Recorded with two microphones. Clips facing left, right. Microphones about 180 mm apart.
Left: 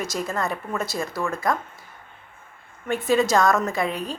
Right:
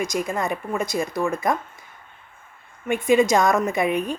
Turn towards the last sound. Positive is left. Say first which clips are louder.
# right 4 dB
turn(degrees=-20)  # may be behind; listen again after turning